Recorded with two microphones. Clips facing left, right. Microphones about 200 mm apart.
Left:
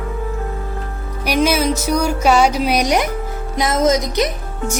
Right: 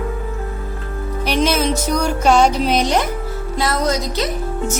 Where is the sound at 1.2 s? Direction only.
10° left (ahead or behind).